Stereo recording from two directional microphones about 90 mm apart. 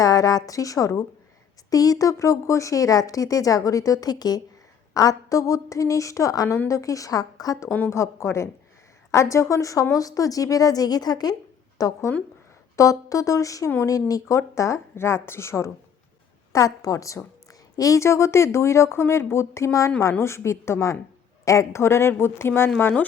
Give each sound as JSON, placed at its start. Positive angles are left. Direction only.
{"t": 0.0, "sound": "a woman's voice", "side_deg": 40}
{"t": 7.9, "sound": "a woman's voice", "side_deg": 30}